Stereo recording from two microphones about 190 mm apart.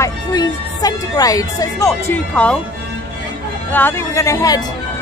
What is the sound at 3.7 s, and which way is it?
Speech, 10° left (ahead or behind).